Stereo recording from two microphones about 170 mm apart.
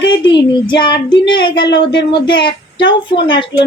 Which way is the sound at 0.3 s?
30° left (ahead or behind).